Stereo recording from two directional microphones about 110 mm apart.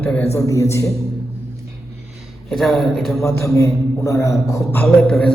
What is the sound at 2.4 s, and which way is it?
Speech, centre (ahead or behind).